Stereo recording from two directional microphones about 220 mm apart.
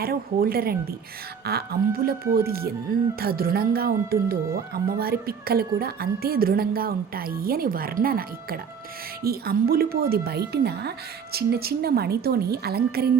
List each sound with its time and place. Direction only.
0.0 s speech: 45° right (ahead or behind)